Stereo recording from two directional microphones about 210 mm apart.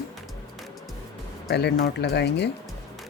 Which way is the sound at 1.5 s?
50° left (ahead or behind).